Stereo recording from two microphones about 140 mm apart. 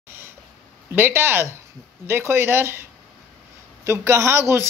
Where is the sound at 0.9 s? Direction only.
15° right (ahead or behind).